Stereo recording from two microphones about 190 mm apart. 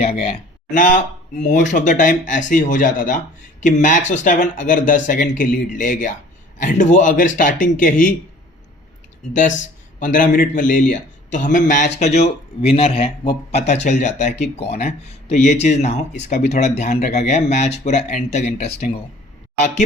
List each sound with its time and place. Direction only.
0.0 s speech: 35° left (ahead or behind)
10.0 s speech: 45° left (ahead or behind)